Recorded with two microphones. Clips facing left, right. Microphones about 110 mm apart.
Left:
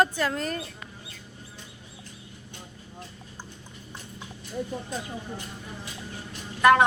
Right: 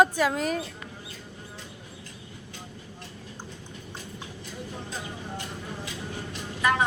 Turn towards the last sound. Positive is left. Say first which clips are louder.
# left 7 dB
turn(degrees=75)  # may be behind; listen again after turning